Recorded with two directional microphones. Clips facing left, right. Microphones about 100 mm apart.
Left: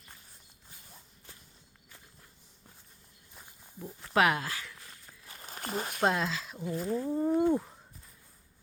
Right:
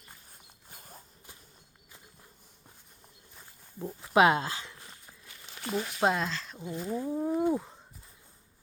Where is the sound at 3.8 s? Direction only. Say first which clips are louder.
Right 4 dB; 15° right (ahead or behind).